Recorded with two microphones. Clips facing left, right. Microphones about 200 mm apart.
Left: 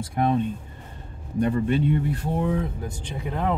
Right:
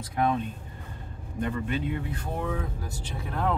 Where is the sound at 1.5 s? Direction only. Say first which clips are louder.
Left 7 dB; 50° left (ahead or behind).